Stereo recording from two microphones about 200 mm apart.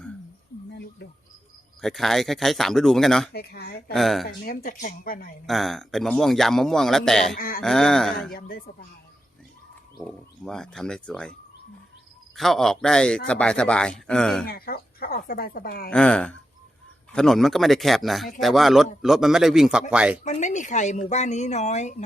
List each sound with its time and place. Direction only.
1.8 s a man's voice: centre (ahead or behind)
3.3 s speech: 55° left (ahead or behind)
3.9 s a man's voice: centre (ahead or behind)
4.3 s speech: 45° left (ahead or behind)
5.5 s a man's voice: centre (ahead or behind)
7.3 s speech: 45° left (ahead or behind)
7.6 s a man's voice: centre (ahead or behind)
8.3 s speech: 45° left (ahead or behind)
10.0 s a man's voice: 5° left (ahead or behind)
12.4 s a man's voice: centre (ahead or behind)
14.4 s speech: 50° left (ahead or behind)
15.9 s a man's voice: 5° left (ahead or behind)
20.2 s speech: 35° left (ahead or behind)